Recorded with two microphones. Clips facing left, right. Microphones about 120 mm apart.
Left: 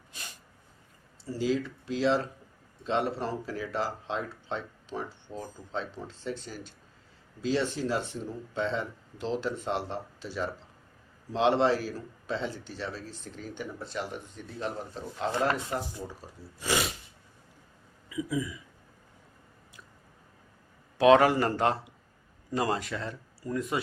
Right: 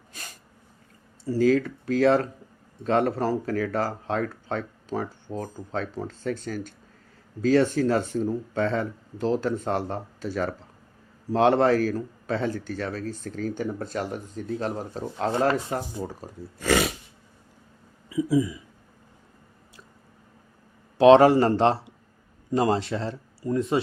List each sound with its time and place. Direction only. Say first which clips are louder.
0.1 s snort: right 2 dB; 45° right (ahead or behind)
1.2 s speech: right 8 dB; 50° right (ahead or behind)
18.1 s speech: right 9 dB; 30° right (ahead or behind)
21.0 s speech: right 6 dB; 30° right (ahead or behind)